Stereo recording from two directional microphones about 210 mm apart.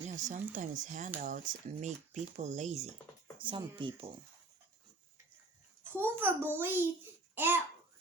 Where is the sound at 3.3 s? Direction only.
25° right (ahead or behind).